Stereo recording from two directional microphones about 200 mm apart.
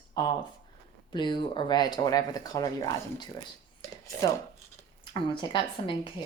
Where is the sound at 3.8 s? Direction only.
15° left (ahead or behind).